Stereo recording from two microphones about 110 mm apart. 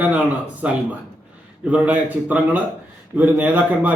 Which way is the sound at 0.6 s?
10° right (ahead or behind).